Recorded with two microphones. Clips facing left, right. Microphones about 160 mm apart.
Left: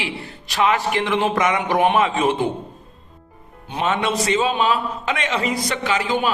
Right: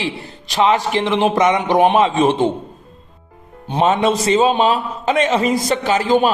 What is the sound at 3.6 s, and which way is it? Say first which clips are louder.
A man's voice: right 6 dB; 30° right (ahead or behind).